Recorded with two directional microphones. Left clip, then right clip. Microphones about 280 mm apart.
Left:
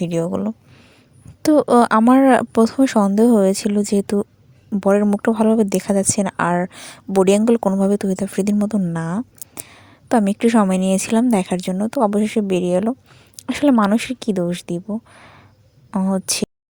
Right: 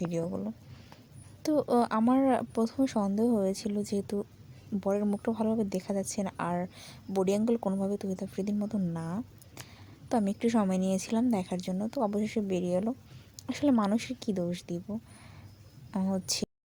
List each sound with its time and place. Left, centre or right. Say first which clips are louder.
0.0 s speech: left 12 dB; left